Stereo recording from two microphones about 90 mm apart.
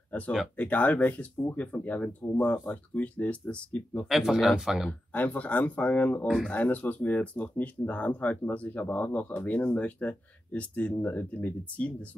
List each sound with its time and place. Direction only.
0.1 s speech: 20° left (ahead or behind)
4.1 s speech: 5° right (ahead or behind)
5.1 s speech: 20° left (ahead or behind)